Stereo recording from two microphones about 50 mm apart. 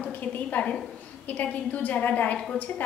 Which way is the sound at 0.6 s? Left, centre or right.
Left.